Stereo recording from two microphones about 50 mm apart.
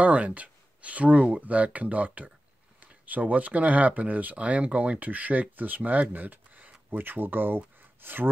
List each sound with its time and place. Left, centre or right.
0.0 s speech: right
5.9 s a sound: right
7.1 s speech: right